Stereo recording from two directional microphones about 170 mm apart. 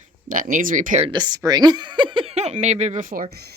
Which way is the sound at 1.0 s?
25° right (ahead or behind).